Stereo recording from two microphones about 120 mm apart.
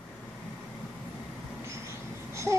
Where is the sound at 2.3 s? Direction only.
25° right (ahead or behind).